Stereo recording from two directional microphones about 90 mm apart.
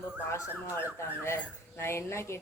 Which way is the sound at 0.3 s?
30° left (ahead or behind).